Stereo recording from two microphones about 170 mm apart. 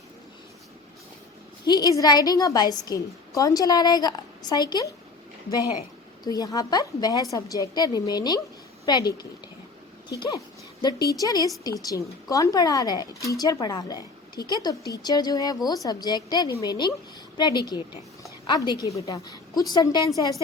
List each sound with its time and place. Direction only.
1.6 s a woman's voice: 20° left (ahead or behind)
6.2 s a woman's voice: 20° left (ahead or behind)